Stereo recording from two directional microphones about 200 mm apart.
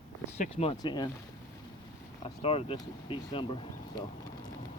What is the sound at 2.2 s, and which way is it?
Speech, 30° left (ahead or behind).